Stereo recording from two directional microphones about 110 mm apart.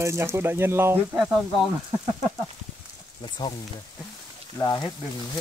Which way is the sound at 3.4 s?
40° left (ahead or behind).